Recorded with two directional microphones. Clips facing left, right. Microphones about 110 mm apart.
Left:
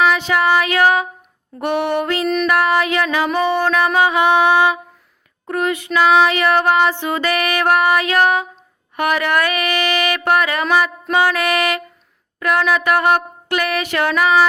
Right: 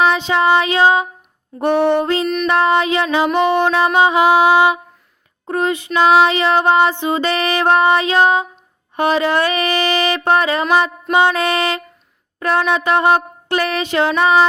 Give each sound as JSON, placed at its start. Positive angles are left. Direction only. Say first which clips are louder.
{"t": 0.0, "sound": "music", "louder": "right 1 dB", "side_deg": -20}
{"t": 2.2, "sound": "music", "louder": "left 1 dB", "side_deg": 0}
{"t": 2.5, "sound": "music", "louder": "right 4 dB", "side_deg": -25}
{"t": 3.2, "sound": "music", "louder": "right 3 dB", "side_deg": -5}
{"t": 3.6, "sound": "music", "louder": "right 2 dB", "side_deg": -25}